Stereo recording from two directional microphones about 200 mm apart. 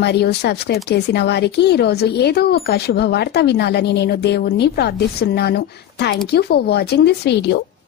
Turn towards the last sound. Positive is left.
turn(degrees=55)  # may be behind; listen again after turning